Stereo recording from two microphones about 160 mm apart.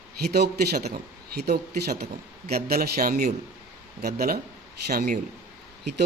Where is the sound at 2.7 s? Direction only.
65° right (ahead or behind).